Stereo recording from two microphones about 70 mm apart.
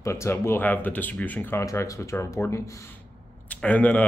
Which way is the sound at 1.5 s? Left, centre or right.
Left.